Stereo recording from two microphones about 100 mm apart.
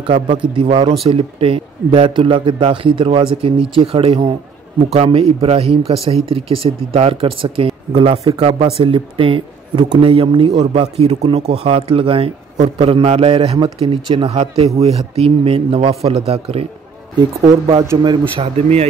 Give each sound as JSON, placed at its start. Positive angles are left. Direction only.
{"t": 0.0, "sound": "speech", "side_deg": -55}
{"t": 1.0, "sound": "speech", "side_deg": -70}
{"t": 3.7, "sound": "a man's voice", "side_deg": -70}
{"t": 10.7, "sound": "a man's voice", "side_deg": -85}
{"t": 17.2, "sound": "speech", "side_deg": -45}
{"t": 18.4, "sound": "speech", "side_deg": -90}